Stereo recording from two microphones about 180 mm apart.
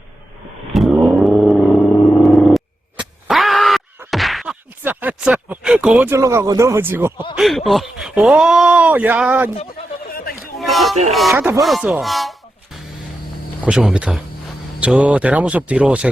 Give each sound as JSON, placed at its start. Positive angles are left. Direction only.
{"t": 0.7, "sound": "vehicle", "side_deg": 0}
{"t": 4.1, "sound": "whack", "side_deg": 0}
{"t": 4.8, "sound": "speech", "side_deg": -10}
{"t": 7.3, "sound": "speech", "side_deg": 0}
{"t": 10.1, "sound": "chatter", "side_deg": 55}
{"t": 10.6, "sound": "a sound", "side_deg": 0}
{"t": 11.1, "sound": "speech", "side_deg": 0}
{"t": 11.3, "sound": "speech", "side_deg": -10}
{"t": 11.6, "sound": "speech", "side_deg": 0}